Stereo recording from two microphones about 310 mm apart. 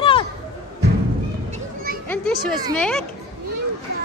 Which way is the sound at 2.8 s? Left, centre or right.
Centre.